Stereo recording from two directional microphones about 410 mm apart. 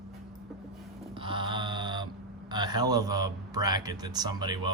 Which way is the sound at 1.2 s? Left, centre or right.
Centre.